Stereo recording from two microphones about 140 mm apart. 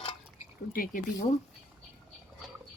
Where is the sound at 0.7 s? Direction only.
90° left.